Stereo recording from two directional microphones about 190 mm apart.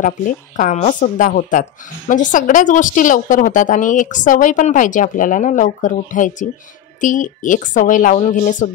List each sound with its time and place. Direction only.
0.0 s speech: 45° left (ahead or behind)